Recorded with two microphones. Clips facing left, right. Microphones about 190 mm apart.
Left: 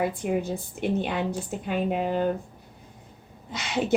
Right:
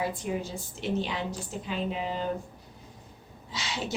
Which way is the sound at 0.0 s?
60° left (ahead or behind).